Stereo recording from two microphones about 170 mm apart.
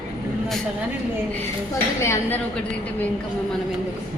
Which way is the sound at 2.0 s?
15° left (ahead or behind).